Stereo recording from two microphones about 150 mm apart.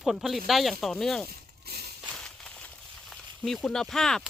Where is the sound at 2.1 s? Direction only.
5° left (ahead or behind).